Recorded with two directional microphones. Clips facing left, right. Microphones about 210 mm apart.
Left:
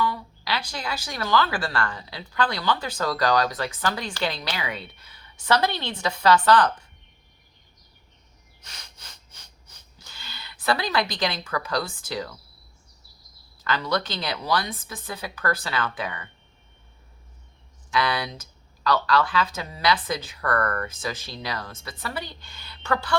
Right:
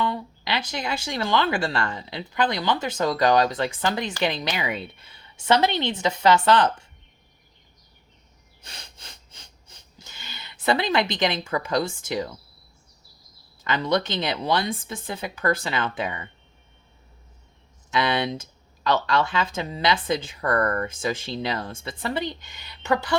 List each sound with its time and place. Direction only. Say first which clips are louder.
0.0 s speech: right 1 dB; 25° right (ahead or behind)
8.6 s a sound: right 3 dB; 30° right (ahead or behind)
9.6 s speech: right 3 dB; 20° right (ahead or behind)
13.7 s speech: right 3 dB; 20° right (ahead or behind)
17.9 s speech: right 2 dB; 25° right (ahead or behind)